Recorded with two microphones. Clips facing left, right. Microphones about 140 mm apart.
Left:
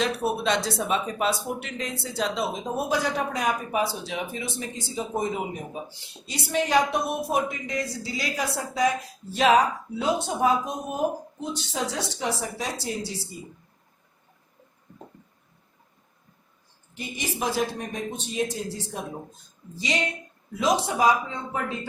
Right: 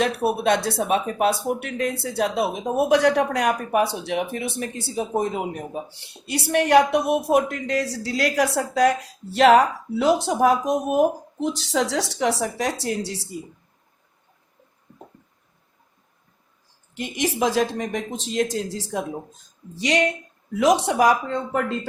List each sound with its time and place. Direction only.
0.4 s a woman's voice: 55° right (ahead or behind); by 13.4 s 75° right (ahead or behind)
16.9 s speech: 85° right
19.7 s a woman's voice: 70° right (ahead or behind)